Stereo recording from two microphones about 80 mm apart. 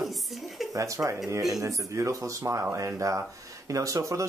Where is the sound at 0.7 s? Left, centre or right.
Right.